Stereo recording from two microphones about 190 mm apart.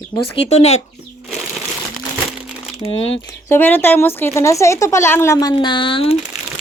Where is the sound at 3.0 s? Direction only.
90° left.